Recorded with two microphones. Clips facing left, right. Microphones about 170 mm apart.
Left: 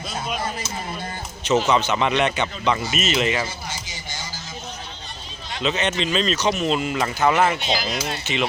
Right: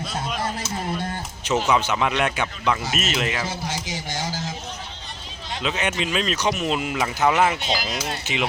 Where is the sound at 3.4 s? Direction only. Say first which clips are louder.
Right 4 dB; 90° right.